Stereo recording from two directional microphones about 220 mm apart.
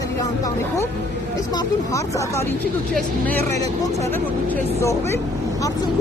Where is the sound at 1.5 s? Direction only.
15° left (ahead or behind).